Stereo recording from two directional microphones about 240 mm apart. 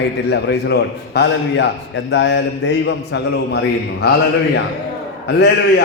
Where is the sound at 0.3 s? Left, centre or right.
Left.